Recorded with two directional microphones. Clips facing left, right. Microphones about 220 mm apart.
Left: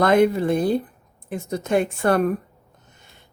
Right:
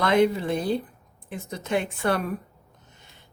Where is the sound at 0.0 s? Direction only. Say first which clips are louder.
Left 4 dB; 50° left (ahead or behind).